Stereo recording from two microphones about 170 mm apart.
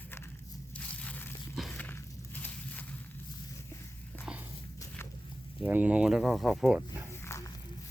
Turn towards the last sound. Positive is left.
turn(degrees=20)  # may be behind; listen again after turning